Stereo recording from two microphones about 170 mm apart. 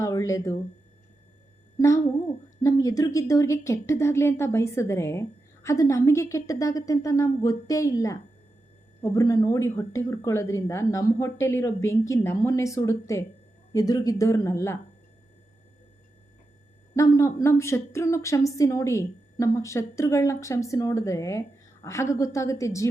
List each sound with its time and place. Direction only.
0.0 s a sound: 20° left (ahead or behind)
2.6 s a woman's voice: 20° left (ahead or behind)
16.9 s a woman's voice: 20° left (ahead or behind)